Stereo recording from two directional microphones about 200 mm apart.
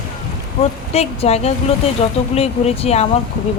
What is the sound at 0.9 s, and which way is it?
Speech, 30° left (ahead or behind).